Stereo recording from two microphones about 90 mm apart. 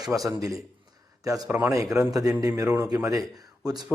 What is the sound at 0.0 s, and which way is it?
Speech, 40° right (ahead or behind).